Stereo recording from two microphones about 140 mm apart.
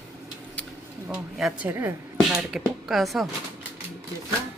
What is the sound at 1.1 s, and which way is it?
Speech, 5° right (ahead or behind).